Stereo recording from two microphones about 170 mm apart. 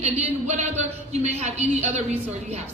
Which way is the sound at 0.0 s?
40° right (ahead or behind).